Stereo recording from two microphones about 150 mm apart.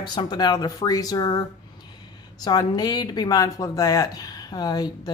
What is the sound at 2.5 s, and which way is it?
Speech, 25° left (ahead or behind).